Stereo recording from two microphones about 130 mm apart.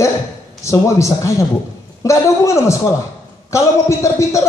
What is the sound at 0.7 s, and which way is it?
A man's voice, 20° left (ahead or behind).